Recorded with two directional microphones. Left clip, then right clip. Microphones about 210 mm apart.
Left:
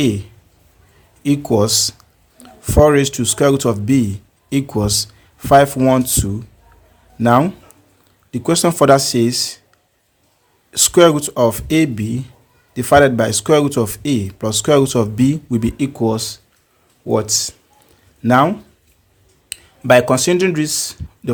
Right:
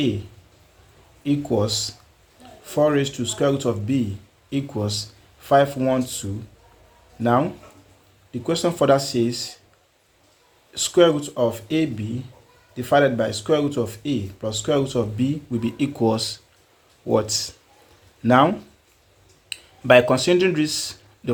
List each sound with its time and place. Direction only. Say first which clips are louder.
1.2 s speech: left 7 dB; 40° left (ahead or behind)
10.7 s speech: left 6 dB; 45° left (ahead or behind)